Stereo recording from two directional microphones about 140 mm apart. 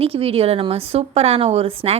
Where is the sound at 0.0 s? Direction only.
45° right (ahead or behind).